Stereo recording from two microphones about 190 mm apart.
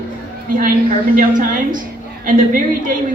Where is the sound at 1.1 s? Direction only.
45° right (ahead or behind).